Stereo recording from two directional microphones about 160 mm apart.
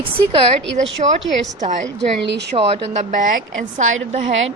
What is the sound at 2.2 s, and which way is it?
Speech, 90° right.